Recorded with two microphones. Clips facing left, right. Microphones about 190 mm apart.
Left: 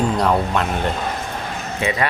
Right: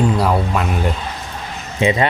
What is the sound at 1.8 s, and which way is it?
Speech, 20° right (ahead or behind).